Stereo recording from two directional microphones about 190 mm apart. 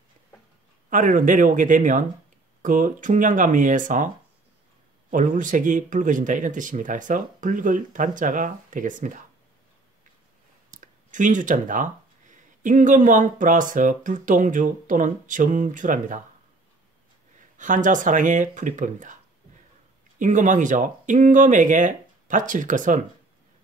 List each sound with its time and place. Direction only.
0.8 s speech: 45° right (ahead or behind)
5.1 s speech: 45° right (ahead or behind)
10.7 s speech: 40° right (ahead or behind)
17.6 s speech: 40° right (ahead or behind)
20.2 s speech: 40° right (ahead or behind)